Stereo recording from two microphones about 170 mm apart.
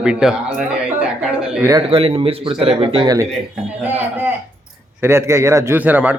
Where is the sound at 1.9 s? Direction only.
35° right (ahead or behind).